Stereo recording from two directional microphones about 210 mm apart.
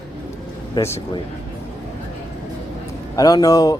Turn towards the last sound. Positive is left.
turn(degrees=15)  # may be behind; listen again after turning